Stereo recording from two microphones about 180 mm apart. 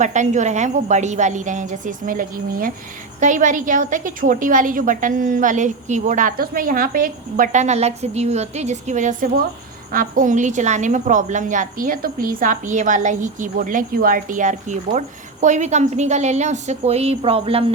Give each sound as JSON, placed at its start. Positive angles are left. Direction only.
{"t": 0.0, "sound": "a woman's voice", "side_deg": -40}